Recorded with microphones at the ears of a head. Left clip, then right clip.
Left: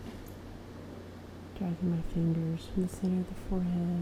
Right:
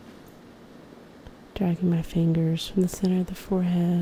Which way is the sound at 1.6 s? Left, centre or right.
Right.